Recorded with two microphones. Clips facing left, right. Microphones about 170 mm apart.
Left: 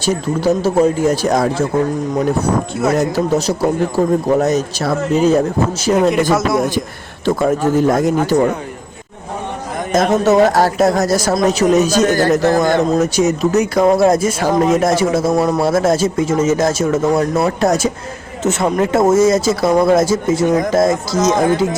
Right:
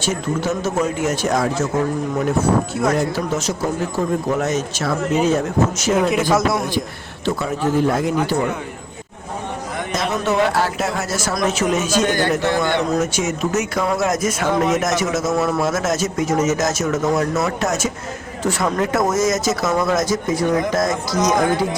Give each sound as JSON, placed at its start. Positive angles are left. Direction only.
{"t": 0.0, "sound": "speech", "side_deg": 35}
{"t": 3.0, "sound": "speech", "side_deg": 35}
{"t": 6.3, "sound": "a man's voice", "side_deg": 0}
{"t": 7.3, "sound": "a man's voice", "side_deg": 45}
{"t": 9.9, "sound": "speech", "side_deg": 45}
{"t": 18.4, "sound": "speech", "side_deg": 25}